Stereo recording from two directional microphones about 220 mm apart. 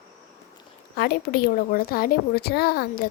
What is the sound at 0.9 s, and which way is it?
A woman's voice, 45° left (ahead or behind).